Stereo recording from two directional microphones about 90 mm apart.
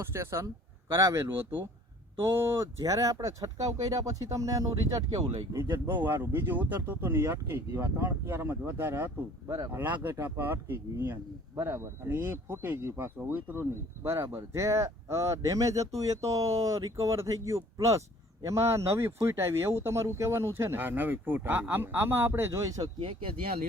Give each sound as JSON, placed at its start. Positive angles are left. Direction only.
{"t": 0.0, "sound": "speech", "side_deg": -30}
{"t": 5.8, "sound": "speech", "side_deg": -25}
{"t": 23.0, "sound": "speech", "side_deg": -75}